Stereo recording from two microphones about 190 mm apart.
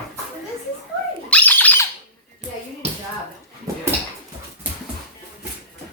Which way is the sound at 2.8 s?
35° right (ahead or behind).